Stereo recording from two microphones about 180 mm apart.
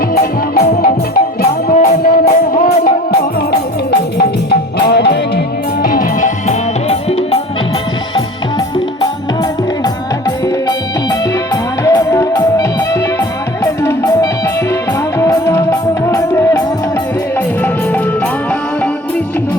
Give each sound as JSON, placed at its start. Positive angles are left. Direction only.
{"t": 1.7, "sound": "music", "side_deg": 45}
{"t": 2.8, "sound": "music", "side_deg": 60}
{"t": 4.9, "sound": "music", "side_deg": 65}
{"t": 5.8, "sound": "music", "side_deg": 50}
{"t": 11.9, "sound": "music", "side_deg": 20}